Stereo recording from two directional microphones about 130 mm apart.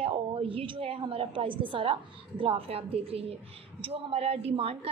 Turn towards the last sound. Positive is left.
turn(degrees=-50)  # may be behind; listen again after turning